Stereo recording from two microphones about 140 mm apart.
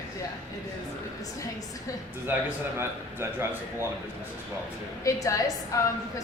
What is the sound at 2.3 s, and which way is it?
A man's voice, 15° right (ahead or behind).